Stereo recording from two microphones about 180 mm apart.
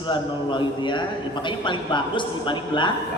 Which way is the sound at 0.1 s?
25° left (ahead or behind).